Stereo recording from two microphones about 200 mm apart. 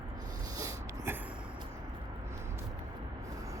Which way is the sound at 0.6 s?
15° right (ahead or behind).